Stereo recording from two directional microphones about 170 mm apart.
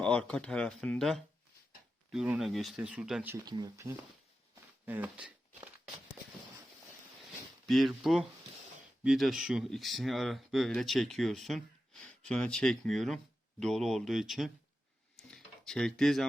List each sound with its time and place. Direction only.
0.0 s speech: 5° left (ahead or behind)
3.4 s speech: 25° right (ahead or behind); by 5.6 s 10° right (ahead or behind)
7.7 s speech: centre (ahead or behind)
15.1 s drawer open or close: 5° left (ahead or behind)